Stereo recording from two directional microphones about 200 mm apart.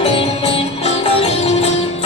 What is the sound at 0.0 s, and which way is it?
Music, 30° left (ahead or behind).